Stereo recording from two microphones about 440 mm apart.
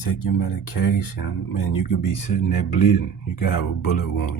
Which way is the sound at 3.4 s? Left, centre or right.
Left.